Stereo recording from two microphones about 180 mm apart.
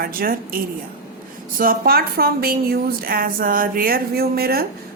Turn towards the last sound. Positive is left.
turn(degrees=-60)  # may be behind; listen again after turning